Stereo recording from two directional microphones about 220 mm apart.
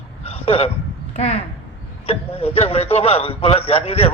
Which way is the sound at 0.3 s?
25° left (ahead or behind).